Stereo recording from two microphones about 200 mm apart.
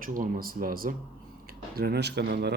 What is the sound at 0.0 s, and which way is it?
Speech, 45° right (ahead or behind).